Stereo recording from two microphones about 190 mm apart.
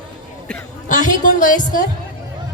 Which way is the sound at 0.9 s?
40° left (ahead or behind).